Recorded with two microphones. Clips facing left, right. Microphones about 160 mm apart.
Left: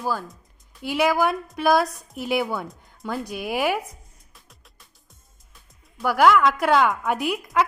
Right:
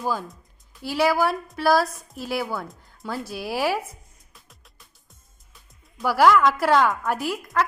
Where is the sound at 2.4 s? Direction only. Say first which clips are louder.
Left 2 dB; centre (ahead or behind).